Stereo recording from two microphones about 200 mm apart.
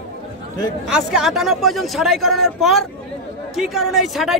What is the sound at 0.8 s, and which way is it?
Speech, 5° right (ahead or behind).